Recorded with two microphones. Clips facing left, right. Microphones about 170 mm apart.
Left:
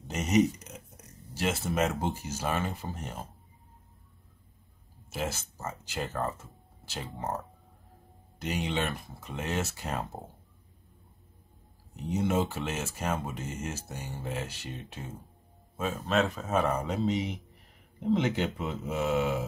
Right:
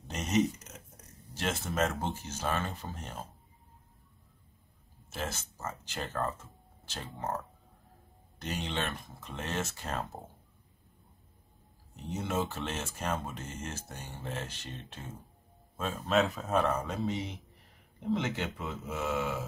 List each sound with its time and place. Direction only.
0.1 s a sound: 5° left (ahead or behind)
1.3 s speech: 10° left (ahead or behind)
5.1 s speech: 10° left (ahead or behind)
12.1 s speech: 15° left (ahead or behind)
16.7 s speech: 15° left (ahead or behind)